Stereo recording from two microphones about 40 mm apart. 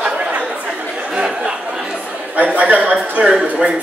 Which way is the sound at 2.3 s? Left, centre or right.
Right.